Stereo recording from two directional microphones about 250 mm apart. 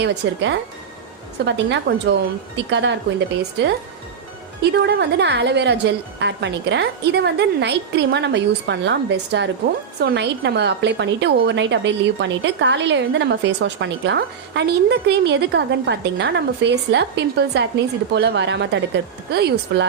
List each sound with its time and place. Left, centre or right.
0.0 s a woman's voice: right
4.7 s a woman's voice: right